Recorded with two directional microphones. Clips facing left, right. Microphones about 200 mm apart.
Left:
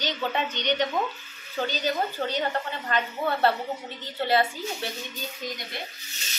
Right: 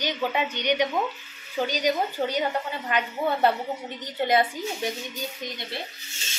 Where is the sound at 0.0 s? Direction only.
10° right (ahead or behind).